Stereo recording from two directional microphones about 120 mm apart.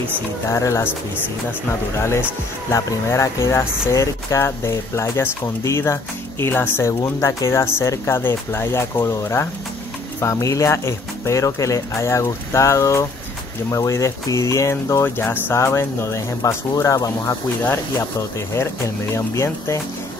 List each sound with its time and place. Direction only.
0.5 s speech: 25° left (ahead or behind)
19.1 s speech: 25° left (ahead or behind)